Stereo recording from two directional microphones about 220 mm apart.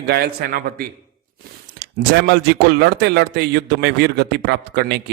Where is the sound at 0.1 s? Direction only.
45° right (ahead or behind).